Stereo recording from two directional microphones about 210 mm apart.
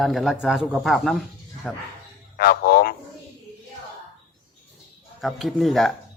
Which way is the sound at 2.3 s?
45° left (ahead or behind).